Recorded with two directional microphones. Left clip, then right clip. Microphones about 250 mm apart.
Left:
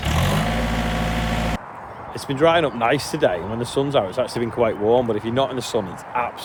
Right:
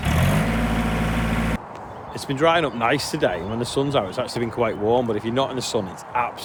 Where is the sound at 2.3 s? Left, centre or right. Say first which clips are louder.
Left 2 dB; centre.